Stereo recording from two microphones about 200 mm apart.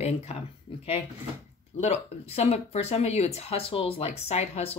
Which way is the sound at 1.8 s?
30° left (ahead or behind).